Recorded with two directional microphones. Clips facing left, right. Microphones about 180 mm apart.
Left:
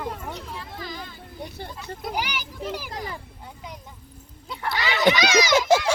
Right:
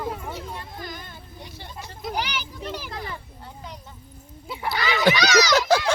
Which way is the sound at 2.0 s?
10° left (ahead or behind).